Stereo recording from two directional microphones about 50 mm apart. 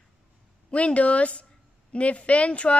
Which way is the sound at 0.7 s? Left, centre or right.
Left.